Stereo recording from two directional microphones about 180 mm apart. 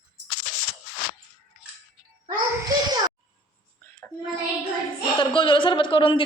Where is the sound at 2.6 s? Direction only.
20° right (ahead or behind).